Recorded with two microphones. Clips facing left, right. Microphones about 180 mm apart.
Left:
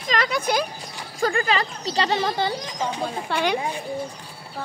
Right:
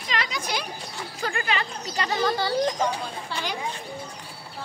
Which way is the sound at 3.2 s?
60° left (ahead or behind).